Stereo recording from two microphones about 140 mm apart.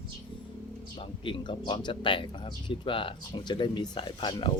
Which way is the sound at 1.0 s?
35° left (ahead or behind).